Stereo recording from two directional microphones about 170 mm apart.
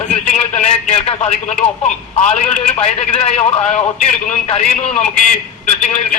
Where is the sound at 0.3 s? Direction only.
45° left (ahead or behind).